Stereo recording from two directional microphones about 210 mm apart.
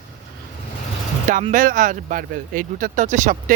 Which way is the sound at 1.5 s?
40° right (ahead or behind).